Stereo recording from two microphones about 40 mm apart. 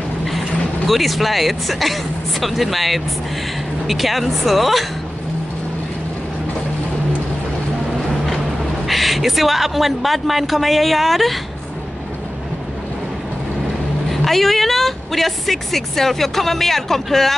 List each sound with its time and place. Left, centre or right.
0.3 s a man's voice: centre
8.8 s a man's voice: centre
14.2 s speech: centre